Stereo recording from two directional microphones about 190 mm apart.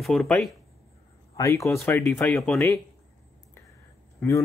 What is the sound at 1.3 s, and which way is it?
Speech, 15° left (ahead or behind).